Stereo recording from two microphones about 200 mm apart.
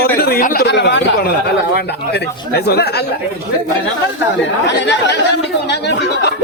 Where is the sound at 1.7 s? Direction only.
55° left (ahead or behind).